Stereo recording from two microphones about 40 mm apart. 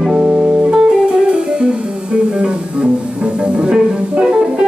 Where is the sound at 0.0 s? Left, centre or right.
Centre.